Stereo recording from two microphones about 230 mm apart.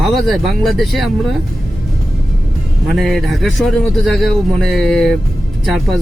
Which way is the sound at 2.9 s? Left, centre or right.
Centre.